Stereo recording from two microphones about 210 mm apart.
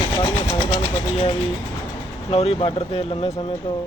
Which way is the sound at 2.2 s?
30° left (ahead or behind).